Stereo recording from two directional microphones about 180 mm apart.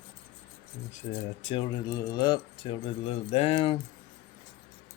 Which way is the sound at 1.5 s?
30° left (ahead or behind).